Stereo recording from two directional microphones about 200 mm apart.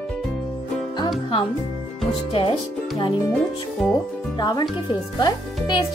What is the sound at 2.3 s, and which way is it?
Speech, 25° left (ahead or behind).